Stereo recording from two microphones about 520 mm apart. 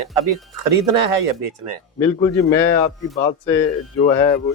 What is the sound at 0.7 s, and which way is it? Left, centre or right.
Speech, right.